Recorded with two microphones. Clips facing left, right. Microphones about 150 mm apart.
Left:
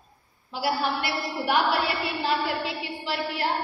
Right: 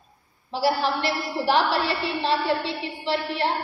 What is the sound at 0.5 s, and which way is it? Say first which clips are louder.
A woman's voice: right 3 dB; 25° right (ahead or behind).